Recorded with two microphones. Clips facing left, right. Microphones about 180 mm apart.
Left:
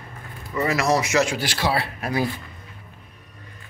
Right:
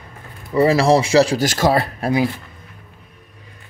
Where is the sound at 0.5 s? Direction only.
30° right (ahead or behind).